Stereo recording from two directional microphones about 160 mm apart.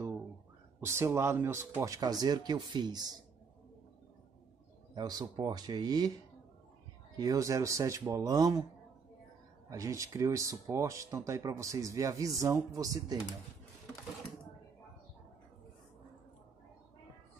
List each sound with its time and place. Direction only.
0.7 s speech: 15° right (ahead or behind)
2.0 s speech: 25° right (ahead or behind)
4.9 s speech: 25° right (ahead or behind)
7.2 s speech: 20° right (ahead or behind)
9.7 s speech: 20° right (ahead or behind)